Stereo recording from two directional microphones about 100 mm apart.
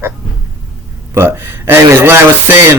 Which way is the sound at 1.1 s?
25° right (ahead or behind).